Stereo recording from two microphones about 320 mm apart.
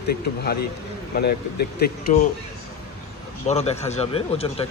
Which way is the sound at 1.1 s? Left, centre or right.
Left.